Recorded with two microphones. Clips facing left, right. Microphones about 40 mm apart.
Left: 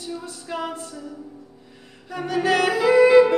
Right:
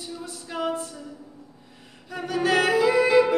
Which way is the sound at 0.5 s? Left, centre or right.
Centre.